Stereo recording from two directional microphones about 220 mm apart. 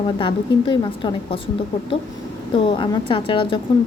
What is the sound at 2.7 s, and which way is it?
Speech, 20° left (ahead or behind).